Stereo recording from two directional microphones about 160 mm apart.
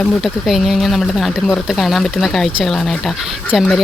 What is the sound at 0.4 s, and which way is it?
Speech, centre (ahead or behind).